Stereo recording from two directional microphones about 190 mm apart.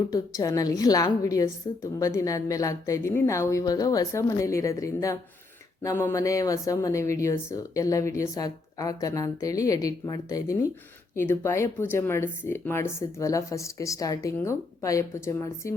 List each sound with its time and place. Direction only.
0.1 s a woman's voice: 15° left (ahead or behind)